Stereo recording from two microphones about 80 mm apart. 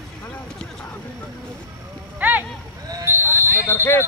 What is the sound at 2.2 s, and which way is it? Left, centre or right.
Vehicle, right.